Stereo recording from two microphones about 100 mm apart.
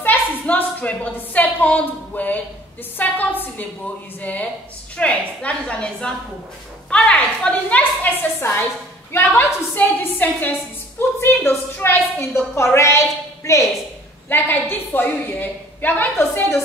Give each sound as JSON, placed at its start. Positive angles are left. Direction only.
{"t": 0.0, "sound": "a woman's voice", "side_deg": 20}